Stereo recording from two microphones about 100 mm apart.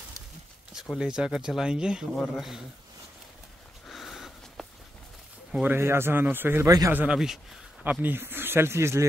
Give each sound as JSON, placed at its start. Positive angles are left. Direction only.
{"t": 0.9, "sound": "speech", "side_deg": -10}
{"t": 2.1, "sound": "a man's voice", "side_deg": 10}
{"t": 3.8, "sound": "sniff", "side_deg": 0}
{"t": 5.5, "sound": "speech", "side_deg": -15}
{"t": 5.8, "sound": "speech", "side_deg": -25}